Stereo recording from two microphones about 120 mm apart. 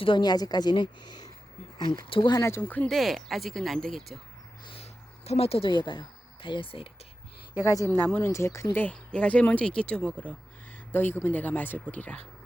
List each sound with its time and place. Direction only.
0.0 s a woman's voice: 40° left (ahead or behind)
2.4 s speech: 20° left (ahead or behind)
2.9 s speech: centre (ahead or behind)
4.6 s a sound: 55° left (ahead or behind)
7.6 s speech: 30° left (ahead or behind); by 12.2 s 10° left (ahead or behind)